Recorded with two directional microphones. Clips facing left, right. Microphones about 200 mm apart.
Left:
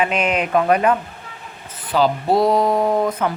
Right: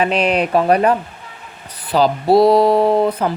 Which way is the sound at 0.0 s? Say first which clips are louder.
Right 3 dB; 35° right (ahead or behind).